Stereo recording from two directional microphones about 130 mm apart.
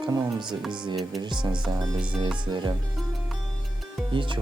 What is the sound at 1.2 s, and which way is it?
Speech, 35° right (ahead or behind).